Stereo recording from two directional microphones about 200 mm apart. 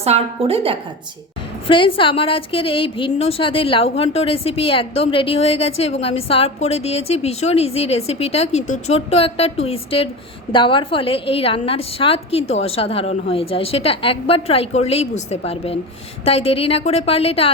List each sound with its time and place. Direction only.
0.0 s a woman's voice: 30° right (ahead or behind)
1.6 s a woman's voice: 25° left (ahead or behind)